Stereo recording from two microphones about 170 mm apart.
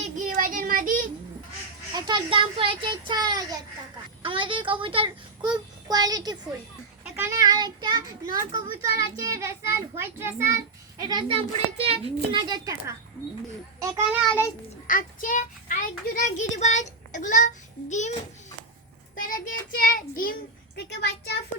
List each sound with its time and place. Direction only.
0.0 s a sound: 50° right (ahead or behind)
2.0 s a child's voice: 25° right (ahead or behind)
13.7 s a child's voice: 20° right (ahead or behind)
14.3 s a child's voice: 15° left (ahead or behind)
14.8 s a child's voice: 55° left (ahead or behind)
19.1 s a child's voice: 55° left (ahead or behind); by 21.3 s 75° left (ahead or behind)